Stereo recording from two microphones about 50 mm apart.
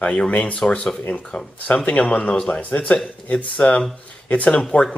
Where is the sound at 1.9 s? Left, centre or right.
Left.